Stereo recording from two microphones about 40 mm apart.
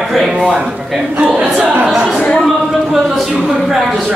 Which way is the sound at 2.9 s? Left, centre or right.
Centre.